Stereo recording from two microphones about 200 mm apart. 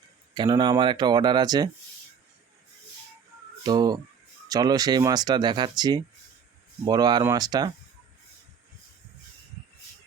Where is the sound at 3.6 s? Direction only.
20° right (ahead or behind).